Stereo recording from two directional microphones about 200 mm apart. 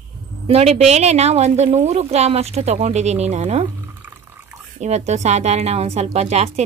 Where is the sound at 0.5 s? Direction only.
30° right (ahead or behind).